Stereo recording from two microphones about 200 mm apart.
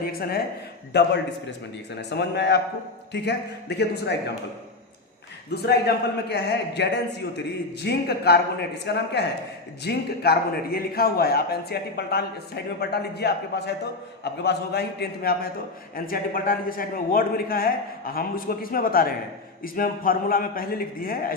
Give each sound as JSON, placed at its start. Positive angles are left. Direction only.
{"t": 0.0, "sound": "a man's voice", "side_deg": 50}
{"t": 5.5, "sound": "a man's voice", "side_deg": 55}